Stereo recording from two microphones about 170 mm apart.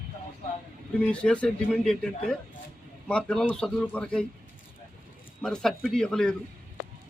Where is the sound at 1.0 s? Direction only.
5° left (ahead or behind).